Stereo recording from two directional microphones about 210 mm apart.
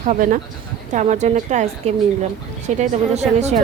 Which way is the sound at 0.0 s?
35° right (ahead or behind).